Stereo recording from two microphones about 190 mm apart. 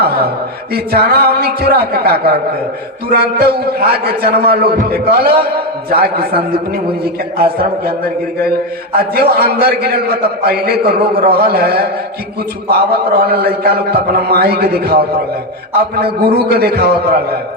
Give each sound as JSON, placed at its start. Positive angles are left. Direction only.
{"t": 0.0, "sound": "a man's voice", "side_deg": -55}